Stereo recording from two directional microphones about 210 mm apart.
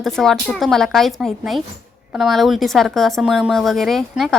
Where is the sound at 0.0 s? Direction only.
Centre (ahead or behind).